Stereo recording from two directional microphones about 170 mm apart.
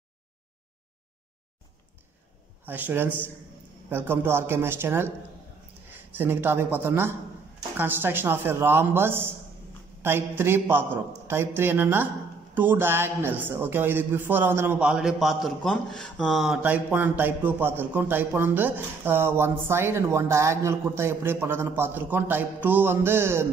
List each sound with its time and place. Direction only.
2.6 s speech: 10° right (ahead or behind)